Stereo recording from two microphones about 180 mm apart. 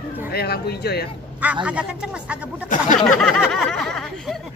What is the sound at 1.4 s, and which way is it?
Speech, 5° right (ahead or behind).